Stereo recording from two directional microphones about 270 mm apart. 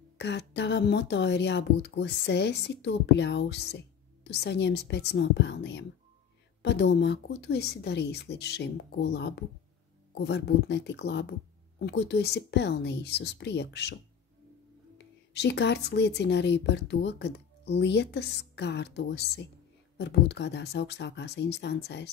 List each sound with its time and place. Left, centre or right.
0.2 s speech: left
15.0 s speech: left